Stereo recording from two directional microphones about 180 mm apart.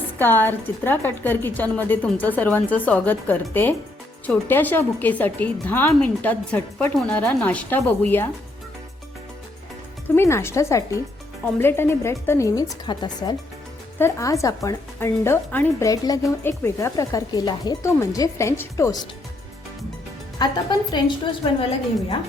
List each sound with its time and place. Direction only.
0.2 s speech: 10° left (ahead or behind)
10.2 s speech: 15° left (ahead or behind)
20.4 s a woman's voice: 25° left (ahead or behind)